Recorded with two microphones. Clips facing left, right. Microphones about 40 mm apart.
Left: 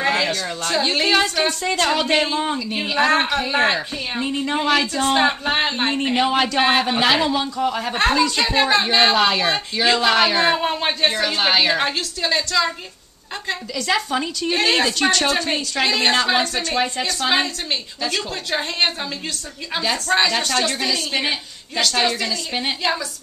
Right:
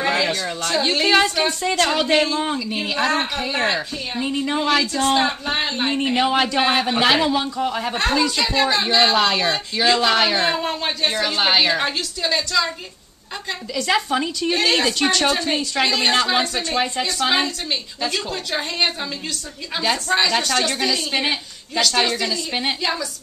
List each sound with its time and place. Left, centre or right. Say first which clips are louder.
0.0 s a sound: even; centre
0.3 s a woman's voice: even; centre
5.1 s speech: left 2 dB; centre
6.0 s a woman's voice: even; centre
8.4 s speech: left 2 dB; centre
9.1 s a woman's voice: left 1 dB; centre
10.5 s speech: left 3 dB; centre
11.1 s a woman's voice: right 1 dB; centre
13.7 s a woman's voice: right 2 dB; centre
22.8 s speech: left 1 dB; centre